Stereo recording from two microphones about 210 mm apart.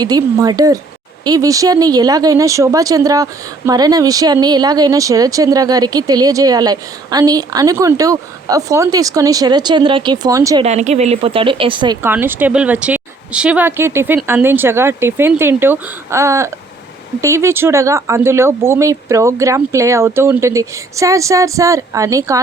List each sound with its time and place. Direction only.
0.0 s speech: 15° right (ahead or behind)
10.6 s a woman's voice: 35° right (ahead or behind)
12.0 s speech: 10° right (ahead or behind)